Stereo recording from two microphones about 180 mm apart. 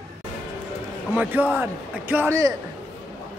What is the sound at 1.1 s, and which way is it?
A man's voice, 10° right (ahead or behind).